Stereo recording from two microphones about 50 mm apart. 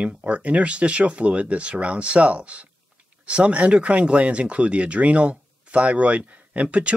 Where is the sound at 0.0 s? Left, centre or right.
Right.